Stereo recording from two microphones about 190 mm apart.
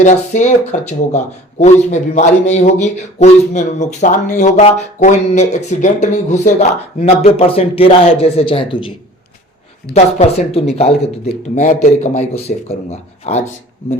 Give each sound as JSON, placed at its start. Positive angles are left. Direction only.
{"t": 0.0, "sound": "speech", "side_deg": 40}
{"t": 9.9, "sound": "speech", "side_deg": 35}